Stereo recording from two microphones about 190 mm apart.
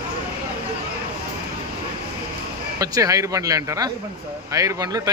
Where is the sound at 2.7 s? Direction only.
20° right (ahead or behind).